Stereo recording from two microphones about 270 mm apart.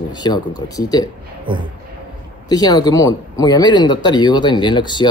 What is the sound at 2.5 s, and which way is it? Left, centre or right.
Speech, centre.